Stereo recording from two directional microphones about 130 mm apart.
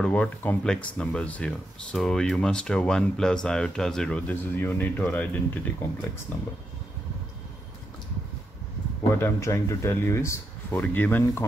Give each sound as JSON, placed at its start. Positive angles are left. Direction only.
{"t": 0.0, "sound": "speech", "side_deg": 10}
{"t": 9.1, "sound": "speech", "side_deg": 20}